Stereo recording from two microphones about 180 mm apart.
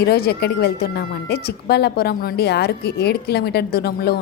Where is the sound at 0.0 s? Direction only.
60° left (ahead or behind).